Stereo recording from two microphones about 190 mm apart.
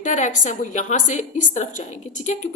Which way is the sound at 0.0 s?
40° left (ahead or behind).